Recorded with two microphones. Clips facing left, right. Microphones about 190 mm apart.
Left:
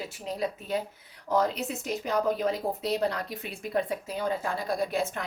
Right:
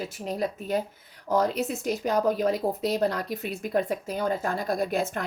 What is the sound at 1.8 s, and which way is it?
Speech, 45° right (ahead or behind).